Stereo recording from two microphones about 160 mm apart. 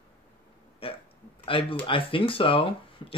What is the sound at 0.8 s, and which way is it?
Burping, 35° left (ahead or behind).